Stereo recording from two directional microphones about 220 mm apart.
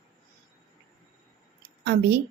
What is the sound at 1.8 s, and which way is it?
Speech, 50° right (ahead or behind).